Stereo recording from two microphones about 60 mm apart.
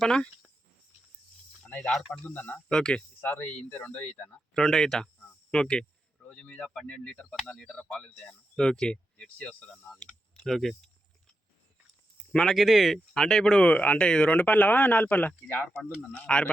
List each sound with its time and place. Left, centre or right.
0.0 s speech: centre
1.9 s speech: centre
2.3 s speech: left
2.6 s speech: centre
4.5 s speech: centre
12.1 s a sound: centre
12.5 s speech: centre
13.1 s speech: centre; by 15.3 s left
16.0 s speech: centre